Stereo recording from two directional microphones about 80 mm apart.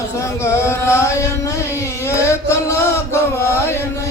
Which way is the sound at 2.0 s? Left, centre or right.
Left.